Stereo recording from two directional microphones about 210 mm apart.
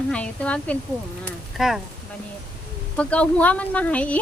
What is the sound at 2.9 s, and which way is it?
Speech, 5° left (ahead or behind).